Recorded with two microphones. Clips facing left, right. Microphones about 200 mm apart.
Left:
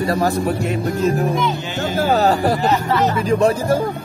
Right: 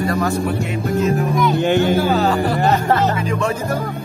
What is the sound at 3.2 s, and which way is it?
Speech, 35° left (ahead or behind).